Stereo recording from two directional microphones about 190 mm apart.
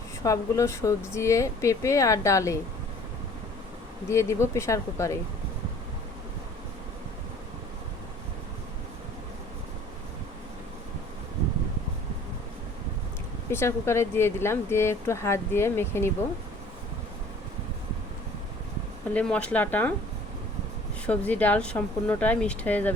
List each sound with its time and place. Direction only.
0.2 s speech: 15° left (ahead or behind)
4.1 s speech: 15° left (ahead or behind)
13.5 s speech: 15° left (ahead or behind)
19.1 s speech: 5° left (ahead or behind)
21.1 s speech: 10° left (ahead or behind)